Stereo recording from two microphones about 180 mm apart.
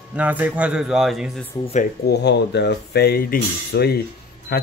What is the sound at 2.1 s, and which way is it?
Speech, 70° left (ahead or behind).